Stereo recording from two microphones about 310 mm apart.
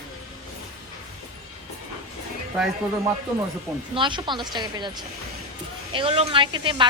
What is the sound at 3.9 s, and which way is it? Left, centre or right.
A woman's voice, centre.